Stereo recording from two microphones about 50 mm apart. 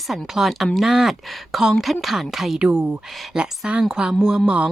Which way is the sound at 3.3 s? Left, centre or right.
Centre.